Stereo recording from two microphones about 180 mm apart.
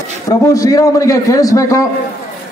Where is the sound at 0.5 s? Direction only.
20° left (ahead or behind).